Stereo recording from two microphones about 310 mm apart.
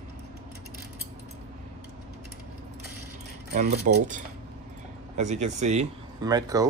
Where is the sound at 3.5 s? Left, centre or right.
Right.